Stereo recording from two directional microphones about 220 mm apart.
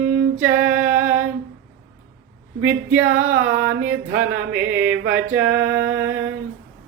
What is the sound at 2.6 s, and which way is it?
Music, 10° right (ahead or behind).